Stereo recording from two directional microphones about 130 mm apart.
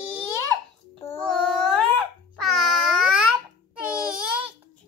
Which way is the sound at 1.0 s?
20° left (ahead or behind).